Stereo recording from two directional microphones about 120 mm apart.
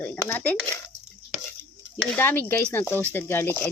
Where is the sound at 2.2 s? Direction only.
15° left (ahead or behind).